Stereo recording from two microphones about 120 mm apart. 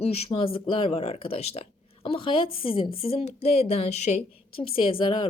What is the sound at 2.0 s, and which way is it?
A woman's voice, 50° left (ahead or behind).